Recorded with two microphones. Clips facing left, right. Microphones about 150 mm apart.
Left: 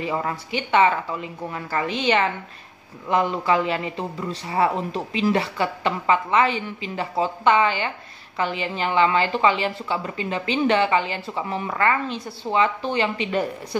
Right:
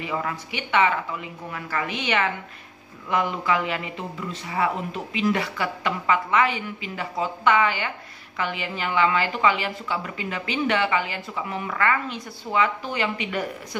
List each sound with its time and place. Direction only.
0.0 s a woman's voice: 30° left (ahead or behind)